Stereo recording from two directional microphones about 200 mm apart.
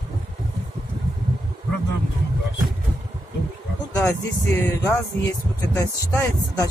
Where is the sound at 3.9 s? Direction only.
15° left (ahead or behind).